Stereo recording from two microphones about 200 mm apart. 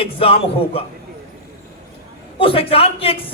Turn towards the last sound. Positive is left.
turn(degrees=30)  # may be behind; listen again after turning